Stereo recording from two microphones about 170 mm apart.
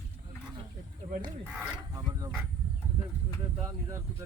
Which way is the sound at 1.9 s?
20° right (ahead or behind).